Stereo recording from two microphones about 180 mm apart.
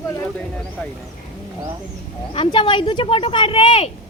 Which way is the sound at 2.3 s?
25° left (ahead or behind).